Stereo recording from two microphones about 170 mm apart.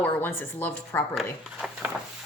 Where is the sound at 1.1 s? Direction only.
Centre (ahead or behind).